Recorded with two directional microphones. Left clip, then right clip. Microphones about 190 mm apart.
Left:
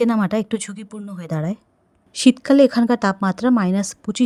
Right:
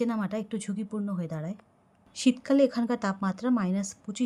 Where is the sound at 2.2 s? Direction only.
45° left (ahead or behind).